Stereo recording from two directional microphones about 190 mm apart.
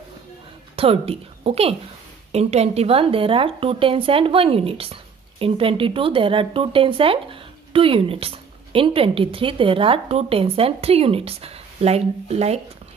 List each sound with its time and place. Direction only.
0.7 s a woman's voice: 30° right (ahead or behind)